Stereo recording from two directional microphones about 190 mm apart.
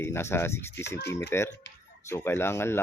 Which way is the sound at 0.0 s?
15° left (ahead or behind).